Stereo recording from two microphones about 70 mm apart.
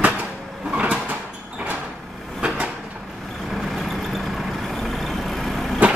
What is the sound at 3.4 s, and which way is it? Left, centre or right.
Vehicle, centre.